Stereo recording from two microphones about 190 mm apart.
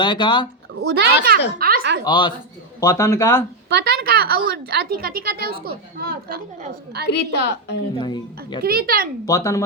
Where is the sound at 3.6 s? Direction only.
60° right (ahead or behind).